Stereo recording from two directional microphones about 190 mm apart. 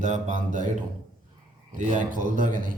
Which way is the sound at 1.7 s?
40° right (ahead or behind).